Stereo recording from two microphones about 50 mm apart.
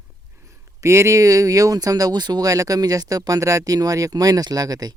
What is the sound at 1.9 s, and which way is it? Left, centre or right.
Speech, right.